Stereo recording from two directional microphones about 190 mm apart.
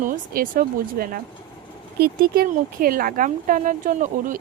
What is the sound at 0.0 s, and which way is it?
Speech, 50° right (ahead or behind).